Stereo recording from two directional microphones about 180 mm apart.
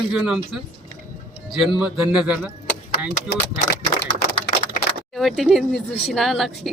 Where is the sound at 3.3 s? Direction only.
65° left (ahead or behind).